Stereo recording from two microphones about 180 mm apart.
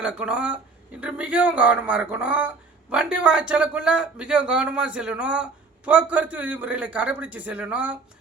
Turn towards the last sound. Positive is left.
turn(degrees=-5)  # may be behind; listen again after turning